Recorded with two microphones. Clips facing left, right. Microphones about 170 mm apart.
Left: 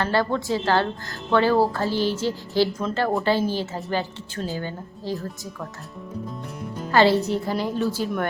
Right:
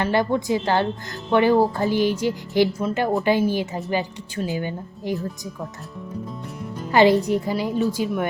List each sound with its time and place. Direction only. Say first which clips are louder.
0.0 s speech: right 2 dB; 15° right (ahead or behind)
6.9 s speech: right 2 dB; 15° right (ahead or behind)